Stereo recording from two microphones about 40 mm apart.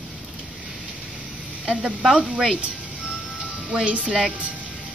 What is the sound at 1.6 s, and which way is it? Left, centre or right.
Speech, right.